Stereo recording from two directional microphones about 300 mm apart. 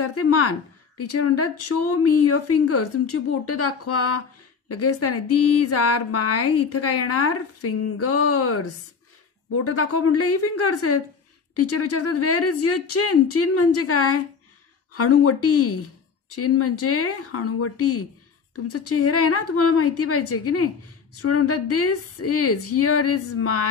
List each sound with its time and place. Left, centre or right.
0.0 s a woman's voice: left
9.7 s a woman's voice: left